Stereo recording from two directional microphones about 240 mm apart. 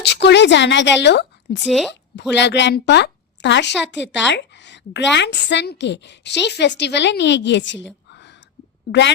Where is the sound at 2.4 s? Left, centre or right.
Left.